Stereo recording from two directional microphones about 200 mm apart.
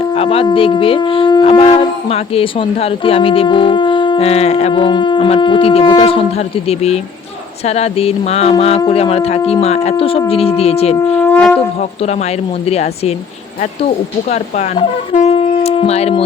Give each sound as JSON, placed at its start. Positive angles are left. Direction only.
{"t": 0.1, "sound": "speech", "side_deg": 30}
{"t": 11.2, "sound": "shofar", "side_deg": 10}
{"t": 11.8, "sound": "speech", "side_deg": 35}